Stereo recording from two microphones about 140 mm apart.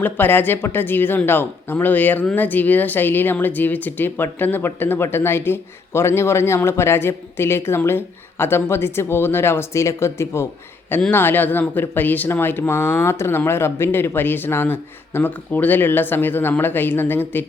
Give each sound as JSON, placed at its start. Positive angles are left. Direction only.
{"t": 0.0, "sound": "speech", "side_deg": 15}